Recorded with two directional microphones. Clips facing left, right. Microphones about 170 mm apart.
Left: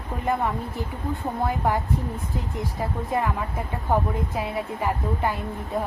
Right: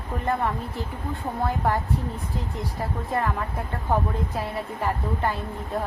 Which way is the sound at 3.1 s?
10° left (ahead or behind).